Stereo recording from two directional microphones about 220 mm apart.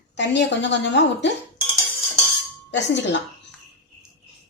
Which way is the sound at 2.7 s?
55° left (ahead or behind).